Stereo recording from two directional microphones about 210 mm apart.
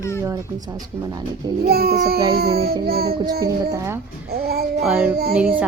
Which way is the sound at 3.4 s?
15° right (ahead or behind).